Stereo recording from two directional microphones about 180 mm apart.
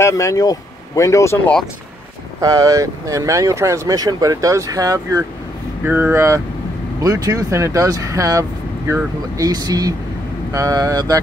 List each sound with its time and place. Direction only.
0.0 s speech: 20° left (ahead or behind)
2.4 s speech: 20° right (ahead or behind)